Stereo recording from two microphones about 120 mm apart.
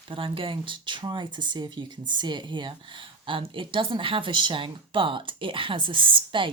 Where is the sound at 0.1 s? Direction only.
50° right (ahead or behind).